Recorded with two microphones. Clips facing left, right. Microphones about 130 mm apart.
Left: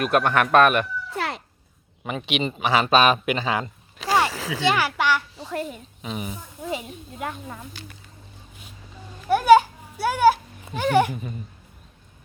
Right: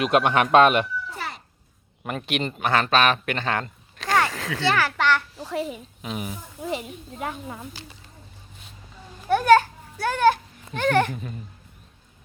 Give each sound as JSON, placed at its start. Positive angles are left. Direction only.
{"t": 0.0, "sound": "speech", "side_deg": -15}
{"t": 1.1, "sound": "a sound", "side_deg": 65}
{"t": 2.0, "sound": "a child's voice", "side_deg": 0}
{"t": 4.3, "sound": "a sound", "side_deg": 5}
{"t": 4.6, "sound": "a child's voice", "side_deg": 15}
{"t": 5.4, "sound": "a child's voice", "side_deg": 0}
{"t": 9.3, "sound": "a child's voice", "side_deg": 10}